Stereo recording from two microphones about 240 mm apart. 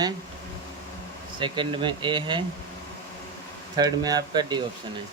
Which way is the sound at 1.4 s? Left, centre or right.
Centre.